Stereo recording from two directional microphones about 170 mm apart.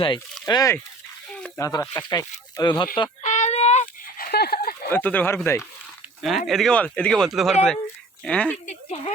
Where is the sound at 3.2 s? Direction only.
45° left (ahead or behind).